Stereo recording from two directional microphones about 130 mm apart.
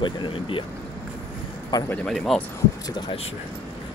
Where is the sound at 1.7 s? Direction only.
30° left (ahead or behind).